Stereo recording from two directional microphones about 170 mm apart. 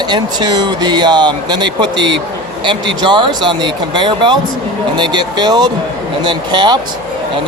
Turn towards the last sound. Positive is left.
turn(degrees=-25)  # may be behind; listen again after turning